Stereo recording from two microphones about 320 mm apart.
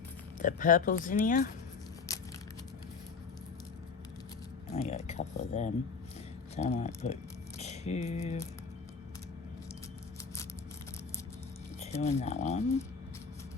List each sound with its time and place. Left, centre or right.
0.3 s speech: left
2.1 s a sound: centre
4.7 s speech: left
11.8 s speech: centre